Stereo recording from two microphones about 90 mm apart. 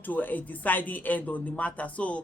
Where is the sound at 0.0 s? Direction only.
20° left (ahead or behind).